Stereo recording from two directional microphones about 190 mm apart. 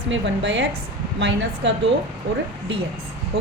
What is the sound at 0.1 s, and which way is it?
A woman's voice, 65° right (ahead or behind).